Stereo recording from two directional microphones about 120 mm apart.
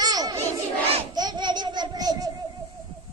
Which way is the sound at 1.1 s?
35° right (ahead or behind).